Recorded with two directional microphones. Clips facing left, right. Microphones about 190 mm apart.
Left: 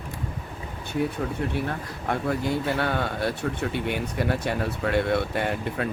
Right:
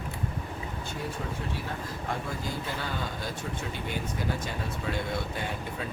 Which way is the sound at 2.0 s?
65° left (ahead or behind).